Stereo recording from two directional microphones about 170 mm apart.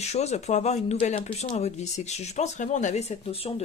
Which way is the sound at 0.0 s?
40° left (ahead or behind).